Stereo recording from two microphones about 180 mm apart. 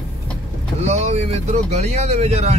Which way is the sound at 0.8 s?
35° right (ahead or behind).